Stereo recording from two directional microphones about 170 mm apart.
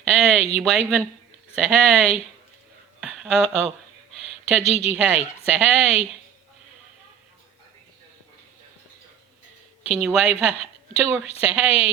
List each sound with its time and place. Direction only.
0.1 s speech: centre (ahead or behind)
3.0 s a sound: 5° right (ahead or behind)
4.6 s speech: 40° left (ahead or behind)
4.9 s a woman's voice: 5° right (ahead or behind)
9.8 s a woman's voice: 5° right (ahead or behind)